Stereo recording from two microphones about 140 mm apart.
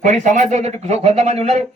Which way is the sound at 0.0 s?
60° right (ahead or behind).